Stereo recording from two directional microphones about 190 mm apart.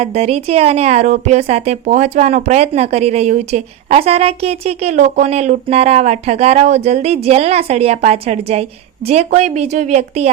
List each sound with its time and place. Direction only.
0.0 s a woman's voice: 35° right (ahead or behind)